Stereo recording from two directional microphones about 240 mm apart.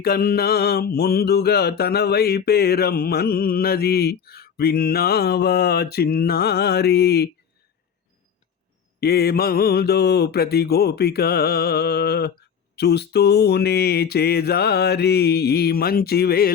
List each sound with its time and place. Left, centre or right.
0.0 s mantra: left
9.0 s mantra: left